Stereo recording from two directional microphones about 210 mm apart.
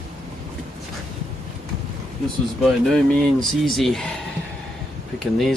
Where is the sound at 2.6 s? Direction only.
Centre (ahead or behind).